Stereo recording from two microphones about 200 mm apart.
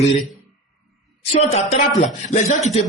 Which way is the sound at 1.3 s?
30° left (ahead or behind).